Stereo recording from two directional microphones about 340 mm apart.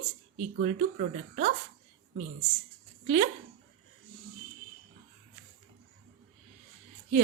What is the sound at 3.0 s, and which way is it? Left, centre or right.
Speech, centre.